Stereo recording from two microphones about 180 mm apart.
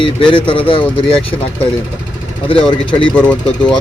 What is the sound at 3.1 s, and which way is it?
Speech, 5° left (ahead or behind).